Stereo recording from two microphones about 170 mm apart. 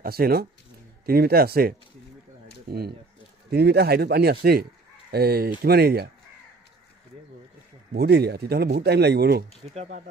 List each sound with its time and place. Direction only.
0.0 s speech: 60° right (ahead or behind)
3.4 s speech: 70° right (ahead or behind)
7.9 s speech: 70° right (ahead or behind)
9.6 s speech: 35° right (ahead or behind)